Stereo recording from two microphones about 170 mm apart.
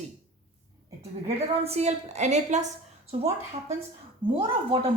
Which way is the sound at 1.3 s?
35° right (ahead or behind).